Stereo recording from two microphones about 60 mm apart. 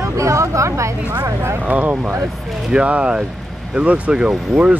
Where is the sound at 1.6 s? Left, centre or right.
Right.